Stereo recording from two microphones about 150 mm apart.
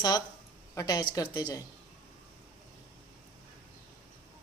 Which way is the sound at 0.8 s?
25° left (ahead or behind).